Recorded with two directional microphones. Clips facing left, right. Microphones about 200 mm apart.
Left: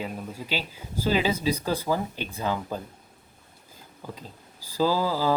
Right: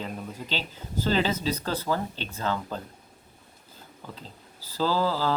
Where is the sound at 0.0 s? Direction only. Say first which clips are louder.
Left 1 dB; 10° left (ahead or behind).